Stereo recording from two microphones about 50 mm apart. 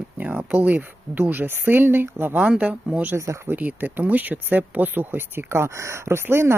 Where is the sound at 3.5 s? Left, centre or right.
Right.